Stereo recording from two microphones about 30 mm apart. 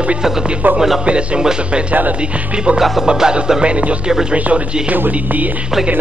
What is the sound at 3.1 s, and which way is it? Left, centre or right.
Music, right.